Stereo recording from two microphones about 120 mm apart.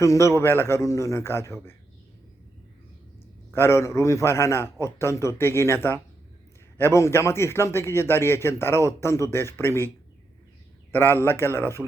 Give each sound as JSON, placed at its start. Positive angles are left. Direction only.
{"t": 0.0, "sound": "a man's voice", "side_deg": 25}
{"t": 3.5, "sound": "a man's voice", "side_deg": 20}
{"t": 10.9, "sound": "a man's voice", "side_deg": 20}